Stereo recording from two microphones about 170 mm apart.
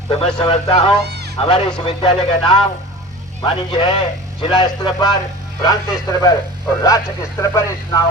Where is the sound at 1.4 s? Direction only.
30° left (ahead or behind).